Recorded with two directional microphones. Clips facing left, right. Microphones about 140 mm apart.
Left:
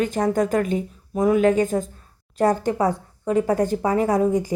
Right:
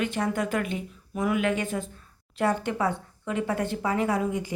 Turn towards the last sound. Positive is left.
turn(degrees=40)  # may be behind; listen again after turning